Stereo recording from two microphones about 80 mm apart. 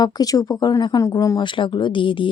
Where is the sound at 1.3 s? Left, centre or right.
Left.